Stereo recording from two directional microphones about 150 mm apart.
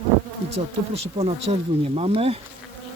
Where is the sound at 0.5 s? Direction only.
40° right (ahead or behind).